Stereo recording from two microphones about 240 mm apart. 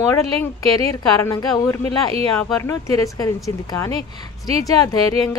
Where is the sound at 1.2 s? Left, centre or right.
Centre.